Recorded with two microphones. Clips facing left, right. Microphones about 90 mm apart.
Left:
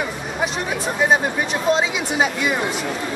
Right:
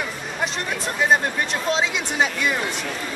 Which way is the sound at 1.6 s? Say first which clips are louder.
Left 6 dB; 5° left (ahead or behind).